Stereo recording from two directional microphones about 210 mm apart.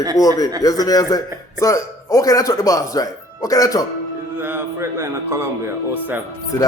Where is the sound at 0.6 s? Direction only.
15° left (ahead or behind).